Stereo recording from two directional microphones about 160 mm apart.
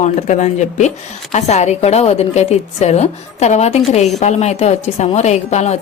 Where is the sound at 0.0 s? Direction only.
45° left (ahead or behind).